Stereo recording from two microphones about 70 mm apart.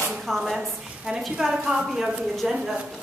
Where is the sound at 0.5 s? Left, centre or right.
Centre.